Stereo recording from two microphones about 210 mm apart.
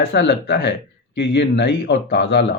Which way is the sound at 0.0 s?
55° left (ahead or behind).